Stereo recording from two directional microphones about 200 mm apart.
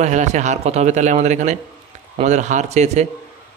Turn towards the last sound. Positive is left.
turn(degrees=-35)  # may be behind; listen again after turning